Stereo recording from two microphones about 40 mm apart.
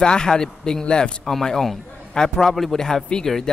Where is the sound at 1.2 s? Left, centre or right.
Centre.